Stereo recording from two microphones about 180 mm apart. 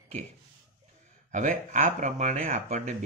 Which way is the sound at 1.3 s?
45° right (ahead or behind).